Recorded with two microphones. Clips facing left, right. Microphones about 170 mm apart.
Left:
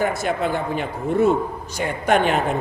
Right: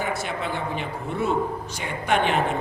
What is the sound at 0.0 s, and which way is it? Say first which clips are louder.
Speech: left 6 dB; 45° left (ahead or behind).